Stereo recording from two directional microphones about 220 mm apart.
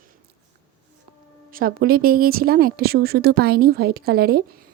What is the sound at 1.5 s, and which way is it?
A woman's voice, 40° right (ahead or behind).